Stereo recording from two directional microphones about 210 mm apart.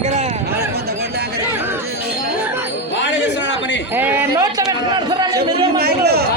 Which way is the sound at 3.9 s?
10° right (ahead or behind).